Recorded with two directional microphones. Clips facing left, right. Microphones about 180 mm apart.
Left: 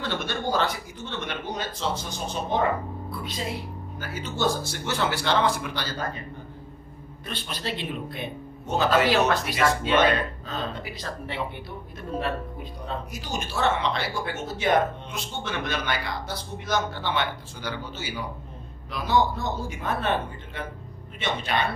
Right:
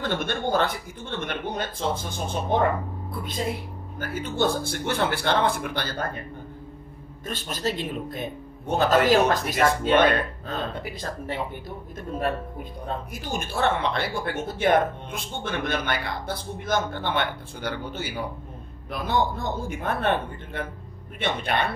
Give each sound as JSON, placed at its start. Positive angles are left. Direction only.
{"t": 0.0, "sound": "speech", "side_deg": -50}
{"t": 7.2, "sound": "speech", "side_deg": -45}
{"t": 12.8, "sound": "a man's voice", "side_deg": -55}